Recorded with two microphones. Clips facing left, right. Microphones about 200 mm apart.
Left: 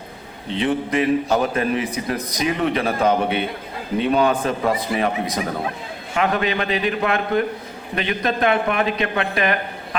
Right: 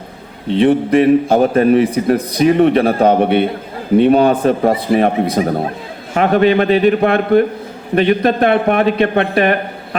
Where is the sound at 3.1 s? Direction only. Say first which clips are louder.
Right 8 dB; 55° right (ahead or behind); by 5.5 s 35° right (ahead or behind).